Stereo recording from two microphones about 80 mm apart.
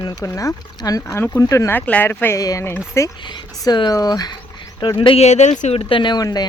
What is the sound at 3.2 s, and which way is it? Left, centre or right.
Speech, left.